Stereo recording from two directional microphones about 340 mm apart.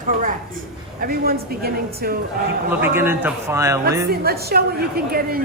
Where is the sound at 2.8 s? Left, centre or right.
Centre.